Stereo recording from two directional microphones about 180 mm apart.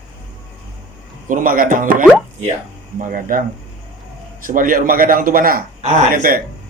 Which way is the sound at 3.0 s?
50° right (ahead or behind).